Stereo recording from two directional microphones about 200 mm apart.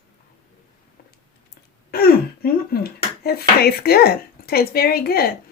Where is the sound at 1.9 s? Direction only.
50° left (ahead or behind).